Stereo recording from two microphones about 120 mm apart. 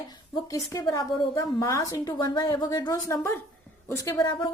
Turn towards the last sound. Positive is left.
turn(degrees=40)  # may be behind; listen again after turning